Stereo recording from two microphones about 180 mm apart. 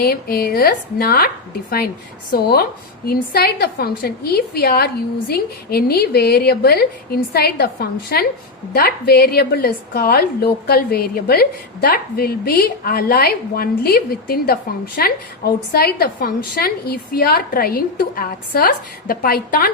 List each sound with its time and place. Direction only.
0.0 s a woman's voice: 60° left (ahead or behind)
2.3 s a woman's voice: 60° left (ahead or behind)